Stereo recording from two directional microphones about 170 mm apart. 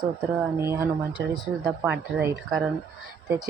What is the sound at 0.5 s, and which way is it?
Speech, 15° right (ahead or behind).